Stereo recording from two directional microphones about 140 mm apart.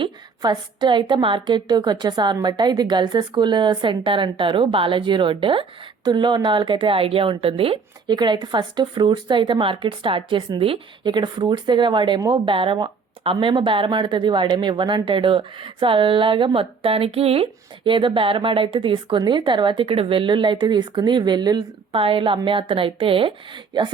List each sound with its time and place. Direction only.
0.0 s a woman's voice: 35° right (ahead or behind)